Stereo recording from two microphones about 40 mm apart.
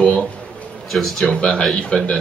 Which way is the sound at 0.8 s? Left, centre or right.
Centre.